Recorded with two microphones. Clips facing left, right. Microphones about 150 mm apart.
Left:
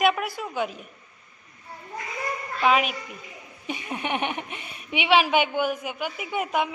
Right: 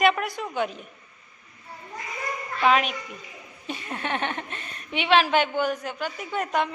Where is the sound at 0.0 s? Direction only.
5° left (ahead or behind).